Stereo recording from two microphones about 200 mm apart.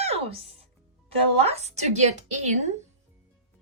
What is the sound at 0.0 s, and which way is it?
Music, 30° right (ahead or behind).